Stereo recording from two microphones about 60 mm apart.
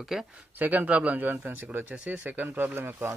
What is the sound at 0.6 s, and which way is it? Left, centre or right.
Speech, right.